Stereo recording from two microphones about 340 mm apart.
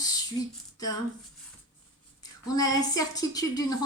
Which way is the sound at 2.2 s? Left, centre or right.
Centre.